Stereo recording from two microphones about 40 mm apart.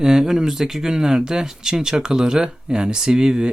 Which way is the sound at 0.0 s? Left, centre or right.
Centre.